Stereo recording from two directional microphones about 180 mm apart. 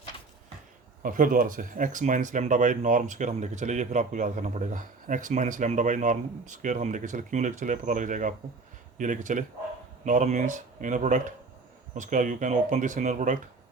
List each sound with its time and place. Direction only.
1.0 s speech: 50° right (ahead or behind)